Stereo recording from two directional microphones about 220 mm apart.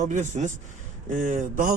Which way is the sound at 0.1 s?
35° right (ahead or behind).